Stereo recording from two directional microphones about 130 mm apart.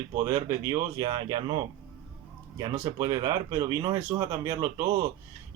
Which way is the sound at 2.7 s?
25° right (ahead or behind).